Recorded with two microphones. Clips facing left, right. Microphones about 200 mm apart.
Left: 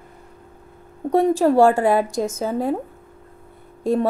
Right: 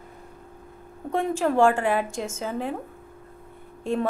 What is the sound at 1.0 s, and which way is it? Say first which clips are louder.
A woman's voice: left 8 dB; 35° left (ahead or behind).